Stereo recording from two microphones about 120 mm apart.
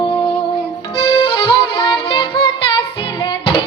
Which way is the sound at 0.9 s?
50° left (ahead or behind).